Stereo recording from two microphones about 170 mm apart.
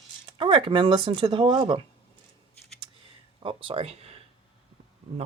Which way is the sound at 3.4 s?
35° right (ahead or behind).